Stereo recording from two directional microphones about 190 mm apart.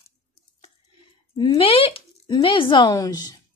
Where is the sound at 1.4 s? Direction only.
25° left (ahead or behind).